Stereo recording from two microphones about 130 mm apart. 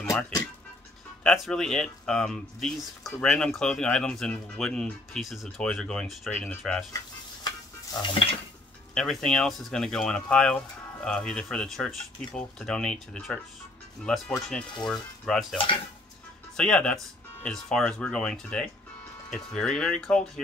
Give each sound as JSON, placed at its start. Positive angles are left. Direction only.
{"t": 0.0, "sound": "music", "side_deg": 25}
{"t": 1.2, "sound": "speech", "side_deg": 0}
{"t": 7.4, "sound": "stir", "side_deg": 35}
{"t": 8.9, "sound": "speech", "side_deg": 5}
{"t": 16.5, "sound": "speech", "side_deg": 5}